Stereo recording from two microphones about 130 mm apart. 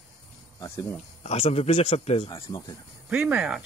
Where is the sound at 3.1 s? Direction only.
5° right (ahead or behind).